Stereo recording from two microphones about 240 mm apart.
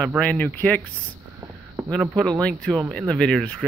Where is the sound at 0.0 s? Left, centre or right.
Centre.